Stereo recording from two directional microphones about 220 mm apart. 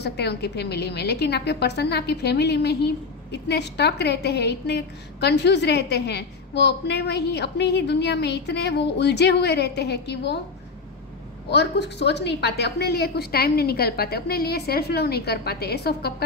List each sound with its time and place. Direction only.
0.0 s a woman's voice: 50° left (ahead or behind)
11.5 s a woman's voice: 50° left (ahead or behind)